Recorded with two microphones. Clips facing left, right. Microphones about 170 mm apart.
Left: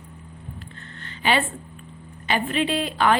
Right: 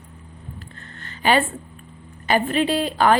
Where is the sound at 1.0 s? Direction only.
45° right (ahead or behind).